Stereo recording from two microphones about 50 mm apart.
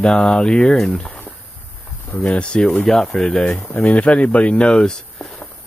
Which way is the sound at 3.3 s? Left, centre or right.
Left.